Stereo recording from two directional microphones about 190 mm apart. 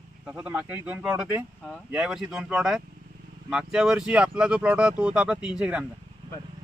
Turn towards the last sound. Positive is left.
turn(degrees=-5)  # may be behind; listen again after turning